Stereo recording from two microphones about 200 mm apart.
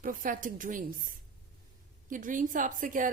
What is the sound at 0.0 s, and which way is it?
A woman's voice, 45° right (ahead or behind).